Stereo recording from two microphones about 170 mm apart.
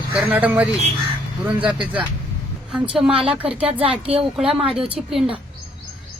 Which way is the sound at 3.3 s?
35° right (ahead or behind).